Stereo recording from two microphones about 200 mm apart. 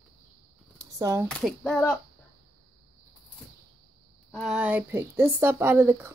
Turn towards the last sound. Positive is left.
turn(degrees=-10)  # may be behind; listen again after turning